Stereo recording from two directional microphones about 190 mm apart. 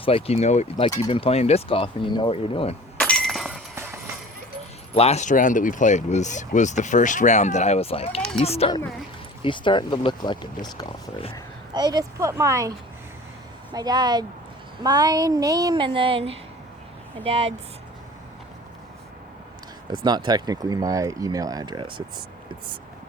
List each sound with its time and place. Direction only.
0.0 s speech: 30° left (ahead or behind)
3.0 s breaking: 5° left (ahead or behind)
4.9 s speech: 35° left (ahead or behind)
11.7 s speech: 20° right (ahead or behind)
13.7 s speech: 20° right (ahead or behind)
20.1 s speech: 20° right (ahead or behind)